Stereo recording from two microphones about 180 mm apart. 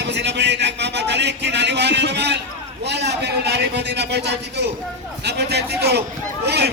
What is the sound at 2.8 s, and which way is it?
A man's voice, 70° right (ahead or behind).